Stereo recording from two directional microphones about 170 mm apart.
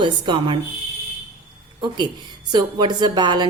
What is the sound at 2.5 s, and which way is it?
A woman's voice, 25° right (ahead or behind).